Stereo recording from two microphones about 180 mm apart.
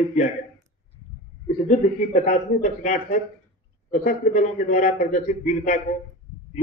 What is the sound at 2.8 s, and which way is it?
A man's voice, 45° left (ahead or behind).